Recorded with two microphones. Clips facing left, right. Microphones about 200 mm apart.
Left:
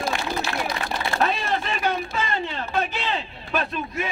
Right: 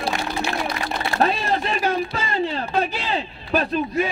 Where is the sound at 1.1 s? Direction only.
40° right (ahead or behind).